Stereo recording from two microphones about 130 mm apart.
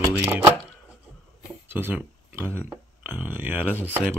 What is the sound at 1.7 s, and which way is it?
Speech, 15° right (ahead or behind).